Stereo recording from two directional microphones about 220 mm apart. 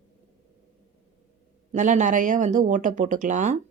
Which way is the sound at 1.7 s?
35° right (ahead or behind).